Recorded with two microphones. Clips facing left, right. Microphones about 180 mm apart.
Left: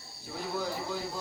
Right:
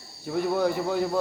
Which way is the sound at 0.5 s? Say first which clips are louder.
Right 8 dB; 60° right (ahead or behind).